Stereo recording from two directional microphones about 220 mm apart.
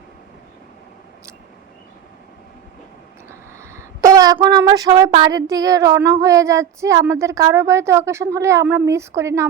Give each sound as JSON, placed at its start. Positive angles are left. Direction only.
{"t": 3.2, "sound": "a woman's voice", "side_deg": -10}